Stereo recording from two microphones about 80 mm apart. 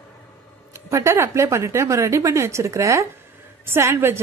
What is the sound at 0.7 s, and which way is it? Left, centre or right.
Speech, right.